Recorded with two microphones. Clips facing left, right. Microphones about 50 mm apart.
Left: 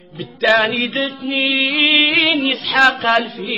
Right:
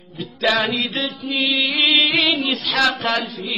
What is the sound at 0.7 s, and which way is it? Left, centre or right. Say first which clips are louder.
Music: left 4 dB; left.